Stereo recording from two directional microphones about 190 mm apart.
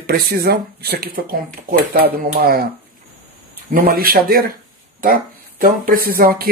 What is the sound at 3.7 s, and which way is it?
Speech, 50° right (ahead or behind).